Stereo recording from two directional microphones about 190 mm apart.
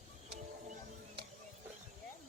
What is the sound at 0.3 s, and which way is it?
Music, 55° right (ahead or behind).